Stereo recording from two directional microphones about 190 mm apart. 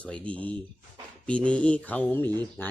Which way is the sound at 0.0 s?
5° left (ahead or behind).